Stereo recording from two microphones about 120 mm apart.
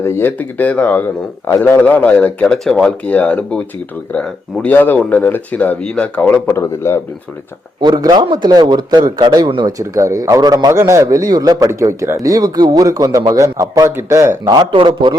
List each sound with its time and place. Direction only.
0.0 s speech: 20° left (ahead or behind)
7.8 s a man's voice: 35° right (ahead or behind)
9.7 s speech: 25° right (ahead or behind)
14.7 s a man's voice: 45° right (ahead or behind)